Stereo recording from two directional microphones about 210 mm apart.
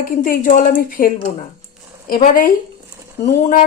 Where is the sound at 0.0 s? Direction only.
40° left (ahead or behind).